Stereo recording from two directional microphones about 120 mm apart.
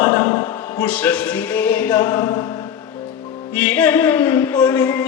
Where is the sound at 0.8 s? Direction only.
10° left (ahead or behind).